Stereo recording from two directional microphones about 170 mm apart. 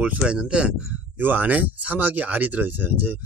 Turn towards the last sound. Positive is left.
turn(degrees=-10)  # may be behind; listen again after turning